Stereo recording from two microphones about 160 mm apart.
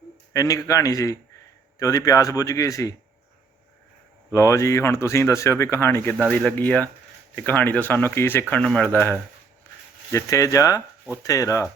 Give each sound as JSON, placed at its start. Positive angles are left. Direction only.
{"t": 0.3, "sound": "a man's voice", "side_deg": 20}
{"t": 4.4, "sound": "a man's voice", "side_deg": 20}